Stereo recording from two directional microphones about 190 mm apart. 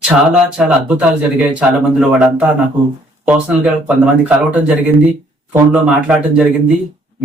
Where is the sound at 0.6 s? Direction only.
5° right (ahead or behind).